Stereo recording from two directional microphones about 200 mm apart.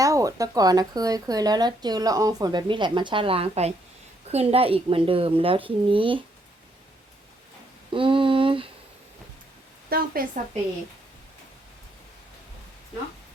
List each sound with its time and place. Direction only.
0.0 s speech: 15° right (ahead or behind)
7.9 s speech: 25° right (ahead or behind)
9.9 s speech: 45° right (ahead or behind)